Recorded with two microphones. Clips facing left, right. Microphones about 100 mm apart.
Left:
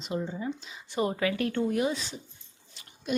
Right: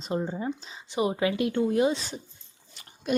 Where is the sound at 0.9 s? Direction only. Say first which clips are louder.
Right 2 dB; 15° right (ahead or behind).